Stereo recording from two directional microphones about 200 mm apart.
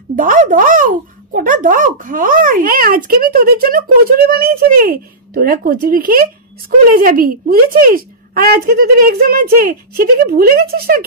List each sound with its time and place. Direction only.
0.1 s speech: 40° right (ahead or behind)